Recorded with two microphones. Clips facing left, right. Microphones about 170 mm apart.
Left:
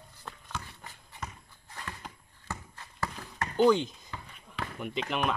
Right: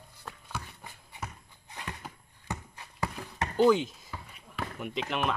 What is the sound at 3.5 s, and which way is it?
Basketball bounce, 5° right (ahead or behind).